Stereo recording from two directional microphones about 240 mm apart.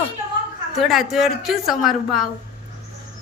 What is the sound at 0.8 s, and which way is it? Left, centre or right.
A woman's voice, centre.